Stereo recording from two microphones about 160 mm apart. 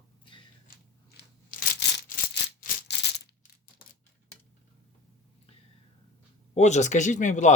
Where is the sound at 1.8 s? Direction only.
90° left.